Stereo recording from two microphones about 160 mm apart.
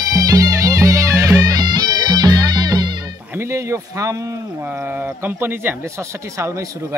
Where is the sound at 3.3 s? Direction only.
15° right (ahead or behind).